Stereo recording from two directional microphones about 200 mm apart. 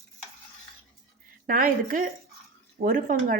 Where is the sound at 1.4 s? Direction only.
45° right (ahead or behind).